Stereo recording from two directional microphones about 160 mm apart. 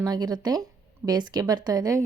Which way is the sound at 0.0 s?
25° right (ahead or behind).